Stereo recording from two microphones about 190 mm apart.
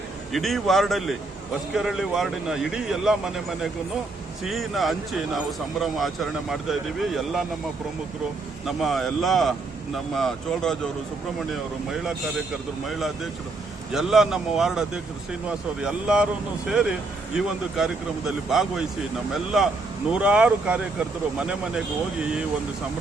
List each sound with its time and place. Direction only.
0.3 s speech: centre (ahead or behind)
8.6 s speech: centre (ahead or behind)
13.9 s speech: centre (ahead or behind)
20.1 s speech: 5° right (ahead or behind)